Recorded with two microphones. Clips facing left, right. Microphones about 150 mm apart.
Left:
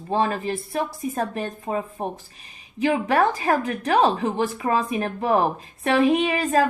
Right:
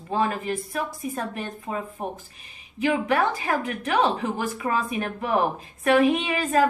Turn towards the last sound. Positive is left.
turn(degrees=35)  # may be behind; listen again after turning